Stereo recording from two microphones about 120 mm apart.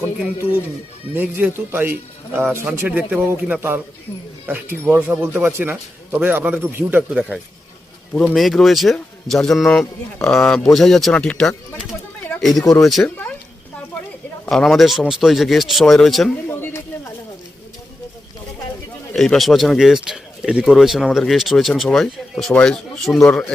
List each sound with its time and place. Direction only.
1.1 s a man's voice: 15° right (ahead or behind)
7.1 s speech: 5° right (ahead or behind)
14.5 s speech: centre (ahead or behind)
16.5 s a sound: 20° left (ahead or behind)
19.1 s speech: centre (ahead or behind)